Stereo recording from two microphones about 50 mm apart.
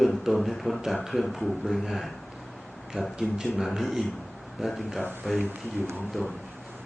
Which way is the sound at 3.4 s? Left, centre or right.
Centre.